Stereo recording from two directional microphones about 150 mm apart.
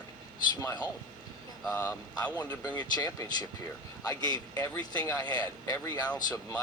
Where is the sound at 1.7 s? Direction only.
10° left (ahead or behind).